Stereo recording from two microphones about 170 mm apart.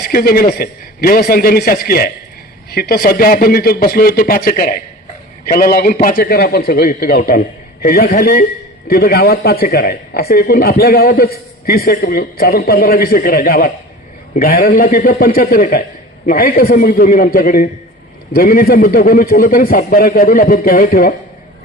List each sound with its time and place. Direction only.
0.0 s a woman's voice: 60° left (ahead or behind)